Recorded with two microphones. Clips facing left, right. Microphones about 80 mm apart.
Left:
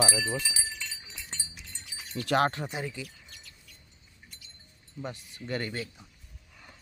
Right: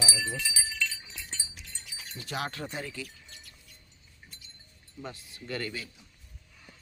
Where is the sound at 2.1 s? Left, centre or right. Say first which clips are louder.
Left 10 dB; left.